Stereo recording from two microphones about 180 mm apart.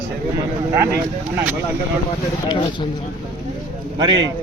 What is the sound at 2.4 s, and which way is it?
Speech, 25° left (ahead or behind).